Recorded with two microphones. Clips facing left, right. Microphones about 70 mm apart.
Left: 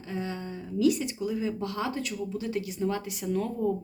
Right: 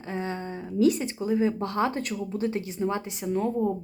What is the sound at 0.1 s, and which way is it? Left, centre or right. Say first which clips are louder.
Speech: right 3 dB; right.